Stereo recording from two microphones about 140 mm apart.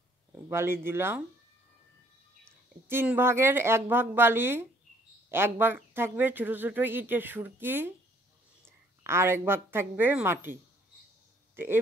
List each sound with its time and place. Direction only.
0.5 s speech: 15° right (ahead or behind)
2.9 s speech: 15° right (ahead or behind)
9.0 s speech: 20° right (ahead or behind)
11.5 s speech: 15° right (ahead or behind)